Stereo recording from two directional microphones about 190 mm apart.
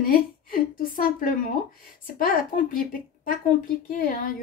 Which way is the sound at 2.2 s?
50° left (ahead or behind).